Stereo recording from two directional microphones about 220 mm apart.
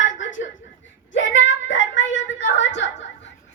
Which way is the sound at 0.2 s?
60° left (ahead or behind).